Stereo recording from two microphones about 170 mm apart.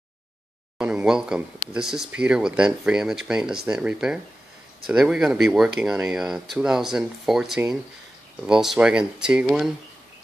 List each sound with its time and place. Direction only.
0.7 s speech: 5° right (ahead or behind)